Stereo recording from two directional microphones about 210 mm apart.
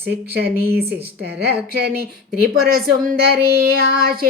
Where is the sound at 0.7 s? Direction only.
50° right (ahead or behind).